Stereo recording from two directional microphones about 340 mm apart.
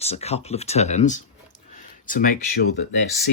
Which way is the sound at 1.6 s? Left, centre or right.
Left.